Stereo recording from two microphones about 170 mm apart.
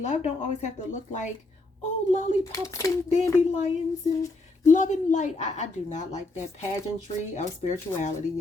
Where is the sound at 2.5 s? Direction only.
20° left (ahead or behind).